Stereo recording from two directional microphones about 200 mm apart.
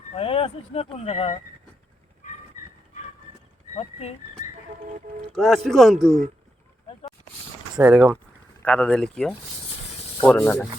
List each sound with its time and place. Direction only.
0.1 s speech: 30° left (ahead or behind)
5.3 s speech: centre (ahead or behind)
7.8 s speech: 5° right (ahead or behind)
8.6 s speech: 5° left (ahead or behind)